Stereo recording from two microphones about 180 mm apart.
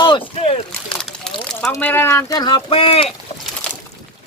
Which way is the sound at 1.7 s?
10° left (ahead or behind).